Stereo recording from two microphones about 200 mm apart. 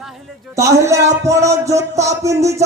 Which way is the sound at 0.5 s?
15° right (ahead or behind).